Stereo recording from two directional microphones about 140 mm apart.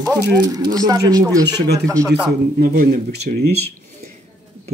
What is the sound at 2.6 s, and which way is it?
Speech, 90° right.